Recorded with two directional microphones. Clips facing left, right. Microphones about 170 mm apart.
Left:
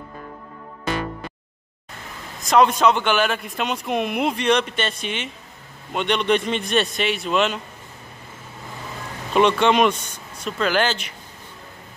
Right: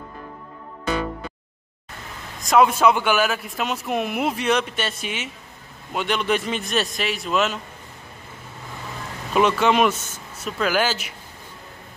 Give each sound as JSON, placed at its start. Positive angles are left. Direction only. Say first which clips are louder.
{"t": 2.4, "sound": "a man's voice", "louder": "even", "side_deg": -5}
{"t": 9.3, "sound": "a man's voice", "louder": "left 1 dB", "side_deg": -5}